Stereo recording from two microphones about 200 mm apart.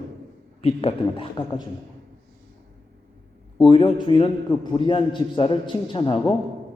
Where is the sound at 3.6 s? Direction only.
25° left (ahead or behind).